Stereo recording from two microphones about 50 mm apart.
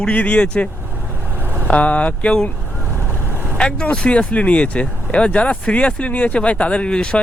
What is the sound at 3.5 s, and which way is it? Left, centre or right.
Speech, left.